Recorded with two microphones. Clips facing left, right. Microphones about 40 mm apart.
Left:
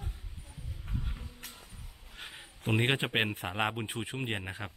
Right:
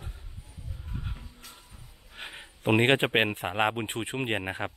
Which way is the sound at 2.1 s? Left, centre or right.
Right.